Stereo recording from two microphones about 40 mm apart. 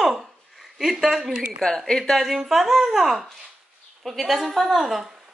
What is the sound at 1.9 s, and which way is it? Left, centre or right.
Speech, centre.